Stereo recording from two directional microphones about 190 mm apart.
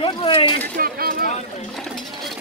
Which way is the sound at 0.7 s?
50° right (ahead or behind).